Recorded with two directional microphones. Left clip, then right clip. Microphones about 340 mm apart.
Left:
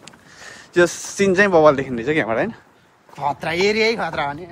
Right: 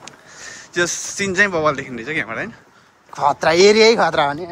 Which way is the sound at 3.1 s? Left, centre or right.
Right.